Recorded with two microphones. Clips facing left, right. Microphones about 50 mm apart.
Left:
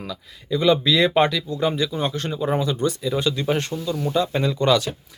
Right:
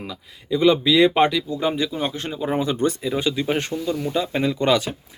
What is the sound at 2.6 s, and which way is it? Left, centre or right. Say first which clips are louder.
Speech: right 1 dB; right.